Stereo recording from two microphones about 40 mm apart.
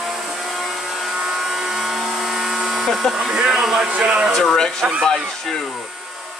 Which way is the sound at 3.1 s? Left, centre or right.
Centre.